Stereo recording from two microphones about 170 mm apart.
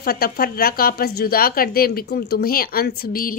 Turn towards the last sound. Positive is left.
turn(degrees=60)  # may be behind; listen again after turning